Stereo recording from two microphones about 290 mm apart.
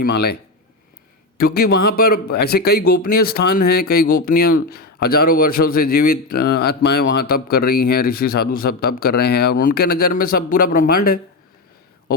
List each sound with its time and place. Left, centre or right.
0.0 s speech: left
1.4 s speech: left